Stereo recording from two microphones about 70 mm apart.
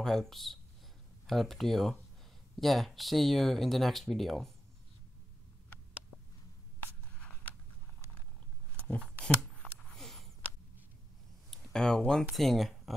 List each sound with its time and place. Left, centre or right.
0.0 s speech: centre
8.8 s a sound: centre
11.5 s speech: centre